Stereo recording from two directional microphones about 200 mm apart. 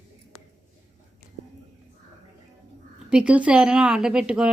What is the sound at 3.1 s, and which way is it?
Speech, 5° right (ahead or behind).